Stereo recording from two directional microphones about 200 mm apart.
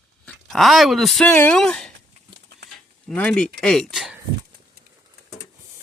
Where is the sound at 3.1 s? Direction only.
5° left (ahead or behind).